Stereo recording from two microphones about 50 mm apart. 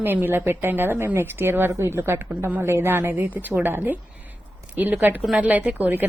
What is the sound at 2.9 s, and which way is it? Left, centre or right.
A woman's voice, right.